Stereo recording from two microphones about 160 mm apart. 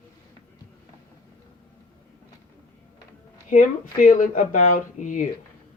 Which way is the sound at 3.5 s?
55° left (ahead or behind).